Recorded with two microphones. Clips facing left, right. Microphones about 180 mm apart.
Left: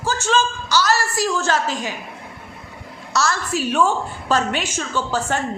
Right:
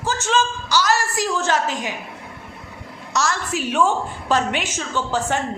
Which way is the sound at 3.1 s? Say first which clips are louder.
Left 1 dB; 15° right (ahead or behind).